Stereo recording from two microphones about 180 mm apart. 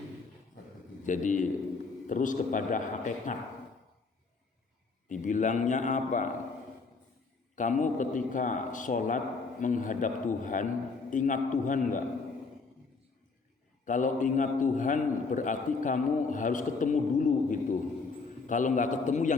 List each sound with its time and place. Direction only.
1.0 s a man's voice: 45° left (ahead or behind)
5.0 s a man's voice: 45° left (ahead or behind)
7.5 s a man's voice: 45° left (ahead or behind)
13.8 s a man's voice: 45° left (ahead or behind)